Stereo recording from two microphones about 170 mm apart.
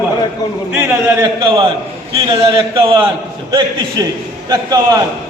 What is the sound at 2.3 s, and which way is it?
Speech, 20° right (ahead or behind).